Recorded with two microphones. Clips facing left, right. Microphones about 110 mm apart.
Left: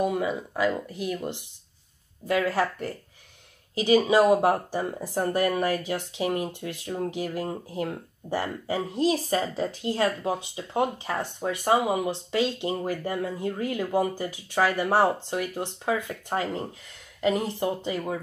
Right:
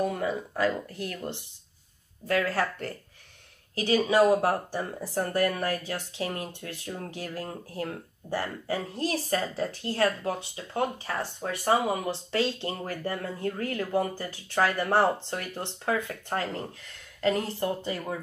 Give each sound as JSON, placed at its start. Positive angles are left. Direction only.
{"t": 0.0, "sound": "speech", "side_deg": 10}
{"t": 3.7, "sound": "speech", "side_deg": 15}